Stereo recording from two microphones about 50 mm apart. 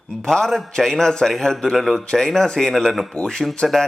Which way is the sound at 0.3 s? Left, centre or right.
Centre.